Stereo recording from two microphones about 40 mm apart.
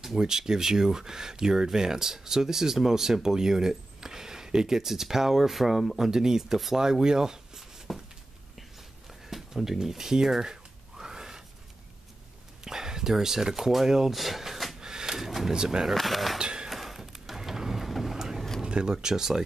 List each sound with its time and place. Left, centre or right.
0.0 s speech: centre
9.3 s a sound: centre
12.6 s speech: centre
14.8 s drawer open or close: centre
15.5 s speech: centre
15.9 s a sound: centre
16.3 s a sound: right
16.6 s vehicle: centre
18.6 s speech: right